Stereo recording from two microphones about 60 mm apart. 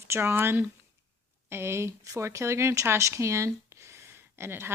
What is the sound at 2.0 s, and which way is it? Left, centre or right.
A woman's voice, right.